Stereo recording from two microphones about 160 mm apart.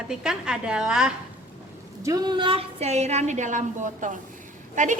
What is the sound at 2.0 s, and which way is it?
A woman's voice, 25° right (ahead or behind).